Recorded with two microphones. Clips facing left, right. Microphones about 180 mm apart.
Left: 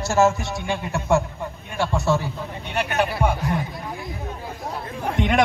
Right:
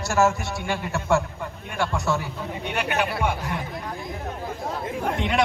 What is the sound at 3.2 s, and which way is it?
Speech, 35° left (ahead or behind).